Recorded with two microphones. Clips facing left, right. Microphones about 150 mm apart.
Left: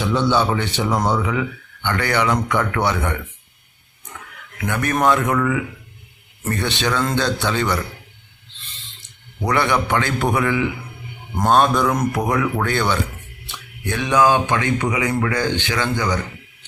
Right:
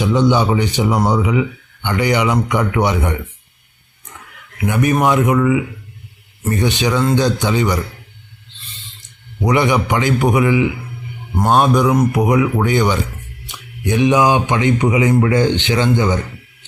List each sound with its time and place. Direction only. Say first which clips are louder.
0.0 s speech: right 4 dB; 15° right (ahead or behind)
4.6 s speech: right 4 dB; 15° right (ahead or behind)
9.4 s speech: right 4 dB; 15° right (ahead or behind)